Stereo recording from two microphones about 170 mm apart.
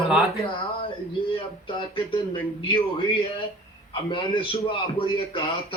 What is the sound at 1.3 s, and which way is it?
Speech, 30° left (ahead or behind).